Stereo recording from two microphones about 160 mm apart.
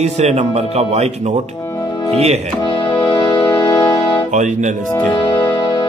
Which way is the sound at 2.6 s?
30° left (ahead or behind).